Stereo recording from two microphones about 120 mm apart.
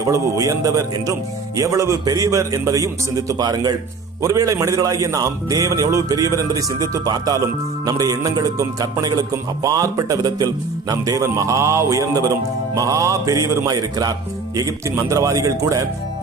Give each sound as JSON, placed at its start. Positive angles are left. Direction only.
{"t": 0.0, "sound": "speech", "side_deg": -25}